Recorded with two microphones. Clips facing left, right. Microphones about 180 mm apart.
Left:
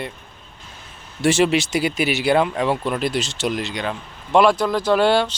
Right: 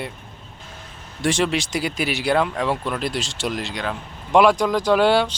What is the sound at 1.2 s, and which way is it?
Speech, 5° left (ahead or behind).